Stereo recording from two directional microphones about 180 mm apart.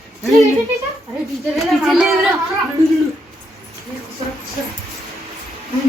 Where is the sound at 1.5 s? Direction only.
Centre (ahead or behind).